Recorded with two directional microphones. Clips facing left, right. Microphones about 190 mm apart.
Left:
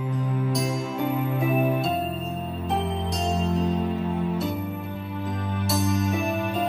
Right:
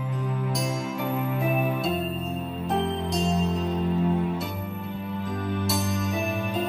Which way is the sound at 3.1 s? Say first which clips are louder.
Left 2 dB; centre (ahead or behind).